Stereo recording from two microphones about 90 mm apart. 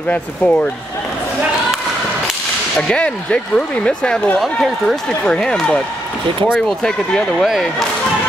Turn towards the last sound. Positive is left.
turn(degrees=0)  # may be behind; listen again after turning